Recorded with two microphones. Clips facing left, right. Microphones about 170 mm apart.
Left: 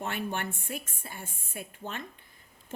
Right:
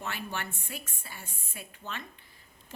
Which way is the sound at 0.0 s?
50° left (ahead or behind).